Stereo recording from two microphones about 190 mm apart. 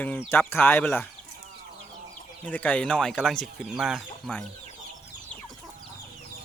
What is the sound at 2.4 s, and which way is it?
Speech, 10° left (ahead or behind).